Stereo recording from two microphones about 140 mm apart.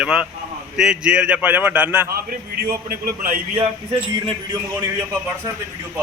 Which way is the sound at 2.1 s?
90° right.